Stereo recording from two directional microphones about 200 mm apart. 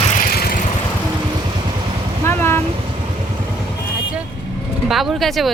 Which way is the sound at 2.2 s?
10° left (ahead or behind).